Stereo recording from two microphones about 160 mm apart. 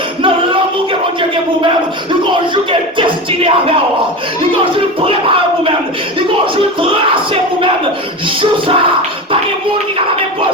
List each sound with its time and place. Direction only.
3.0 s music: 35° right (ahead or behind)
4.6 s speech: 35° right (ahead or behind)
6.1 s a sound: 30° right (ahead or behind)
8.4 s music: 35° right (ahead or behind)